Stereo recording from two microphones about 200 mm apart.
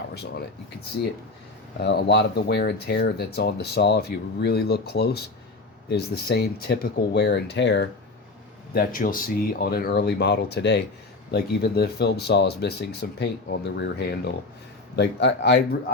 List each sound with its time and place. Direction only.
0.1 s speech: 55° left (ahead or behind)
1.8 s speech: 55° left (ahead or behind)
8.7 s speech: 45° left (ahead or behind); by 15.6 s 60° left (ahead or behind)